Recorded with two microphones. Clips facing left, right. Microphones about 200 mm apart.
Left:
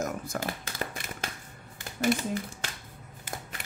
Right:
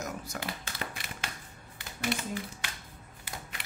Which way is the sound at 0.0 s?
50° left (ahead or behind).